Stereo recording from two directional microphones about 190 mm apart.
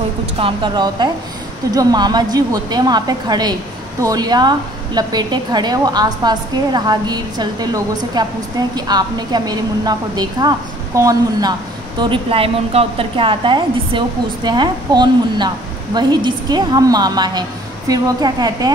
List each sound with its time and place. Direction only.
0.4 s a woman's voice: 25° right (ahead or behind)
12.0 s a woman's voice: 30° right (ahead or behind)